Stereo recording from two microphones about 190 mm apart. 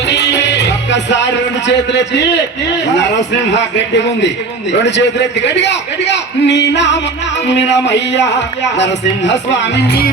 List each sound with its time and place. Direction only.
0.1 s music: 65° left (ahead or behind)